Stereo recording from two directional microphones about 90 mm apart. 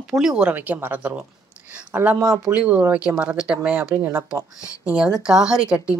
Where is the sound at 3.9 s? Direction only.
25° right (ahead or behind).